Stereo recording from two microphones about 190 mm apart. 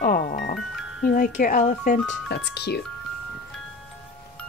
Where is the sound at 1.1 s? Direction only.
45° left (ahead or behind).